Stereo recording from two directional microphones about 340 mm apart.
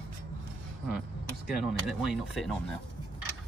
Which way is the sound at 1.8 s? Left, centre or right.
Centre.